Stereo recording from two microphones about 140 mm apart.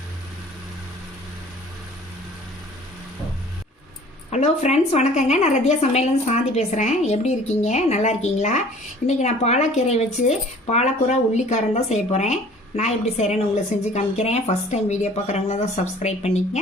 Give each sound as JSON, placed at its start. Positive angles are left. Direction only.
{"t": 4.3, "sound": "a woman's voice", "side_deg": 50}